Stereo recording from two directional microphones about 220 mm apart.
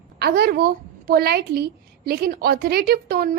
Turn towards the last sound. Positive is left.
turn(degrees=-45)  # may be behind; listen again after turning